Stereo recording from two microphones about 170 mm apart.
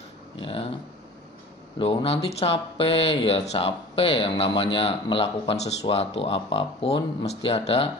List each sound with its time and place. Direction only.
0.4 s speech: 30° left (ahead or behind)
1.8 s speech: 30° left (ahead or behind)